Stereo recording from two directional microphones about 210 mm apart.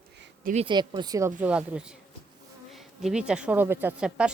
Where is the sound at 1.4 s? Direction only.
5° right (ahead or behind).